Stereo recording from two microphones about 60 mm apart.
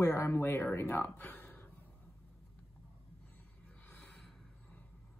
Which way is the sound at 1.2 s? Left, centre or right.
Left.